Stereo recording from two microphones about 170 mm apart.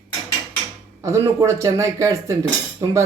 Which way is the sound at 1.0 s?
20° right (ahead or behind).